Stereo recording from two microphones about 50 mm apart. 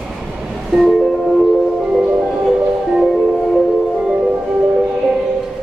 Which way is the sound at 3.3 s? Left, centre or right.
Centre.